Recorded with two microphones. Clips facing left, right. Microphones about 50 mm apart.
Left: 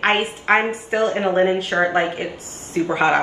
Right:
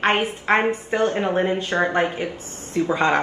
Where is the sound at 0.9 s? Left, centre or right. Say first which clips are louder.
Left 3 dB; centre.